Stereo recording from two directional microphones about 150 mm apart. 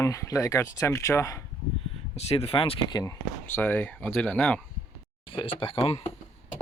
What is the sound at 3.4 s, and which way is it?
Speech, 10° left (ahead or behind).